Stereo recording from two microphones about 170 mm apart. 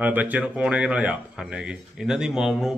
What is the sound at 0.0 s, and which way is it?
Speech, 10° right (ahead or behind).